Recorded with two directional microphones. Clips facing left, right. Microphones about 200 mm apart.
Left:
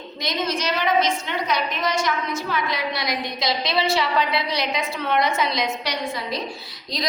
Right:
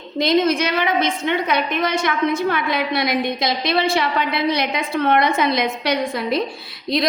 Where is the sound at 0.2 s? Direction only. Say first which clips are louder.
Right 9 dB; 55° right (ahead or behind).